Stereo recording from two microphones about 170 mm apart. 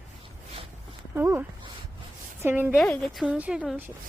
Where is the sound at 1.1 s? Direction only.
10° right (ahead or behind).